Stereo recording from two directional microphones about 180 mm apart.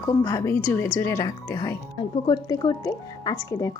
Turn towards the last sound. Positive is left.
turn(degrees=15)  # may be behind; listen again after turning